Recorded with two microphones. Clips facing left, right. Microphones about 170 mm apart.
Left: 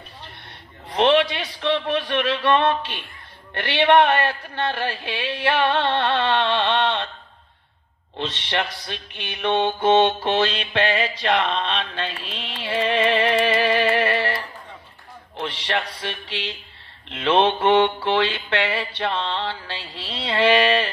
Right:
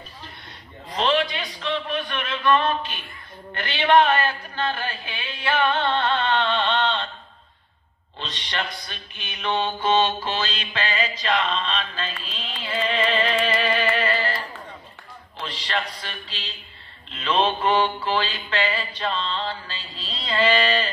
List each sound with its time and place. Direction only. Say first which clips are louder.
0.8 s mantra: left 5 dB; 75° left (ahead or behind)
8.2 s mantra: left 5 dB; 70° left (ahead or behind)
15.4 s a sound: left 3 dB; 75° left (ahead or behind)
17.1 s mantra: left 4 dB; 80° left